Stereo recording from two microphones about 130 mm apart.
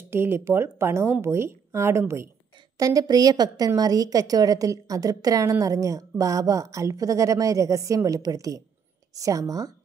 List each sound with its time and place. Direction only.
0.1 s a woman's voice: 20° right (ahead or behind)